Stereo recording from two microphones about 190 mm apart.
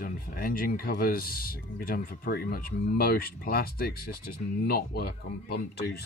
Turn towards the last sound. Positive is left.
turn(degrees=55)  # may be behind; listen again after turning